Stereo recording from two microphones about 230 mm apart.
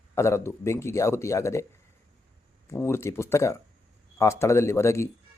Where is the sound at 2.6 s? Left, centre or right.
Centre.